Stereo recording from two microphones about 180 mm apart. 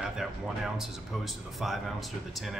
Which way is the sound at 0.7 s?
Centre (ahead or behind).